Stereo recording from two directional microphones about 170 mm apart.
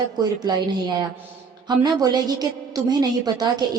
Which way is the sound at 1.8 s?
25° right (ahead or behind).